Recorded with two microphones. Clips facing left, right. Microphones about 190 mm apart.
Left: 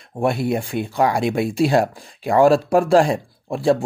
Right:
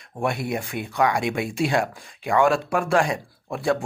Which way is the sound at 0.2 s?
30° left (ahead or behind).